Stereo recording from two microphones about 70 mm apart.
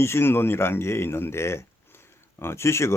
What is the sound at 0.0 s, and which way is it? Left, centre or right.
Speech, left.